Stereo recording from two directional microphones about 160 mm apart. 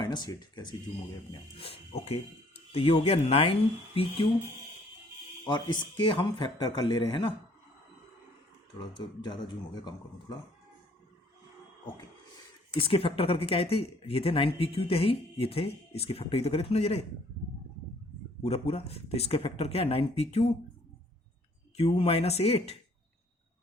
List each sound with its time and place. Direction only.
0.0 s speech: 25° left (ahead or behind)
1.3 s speech: 35° left (ahead or behind)
5.5 s a man's voice: 25° left (ahead or behind)
9.0 s a man's voice: 30° left (ahead or behind)
12.7 s speech: 35° left (ahead or behind)
18.4 s speech: 40° left (ahead or behind)
21.8 s speech: 40° left (ahead or behind)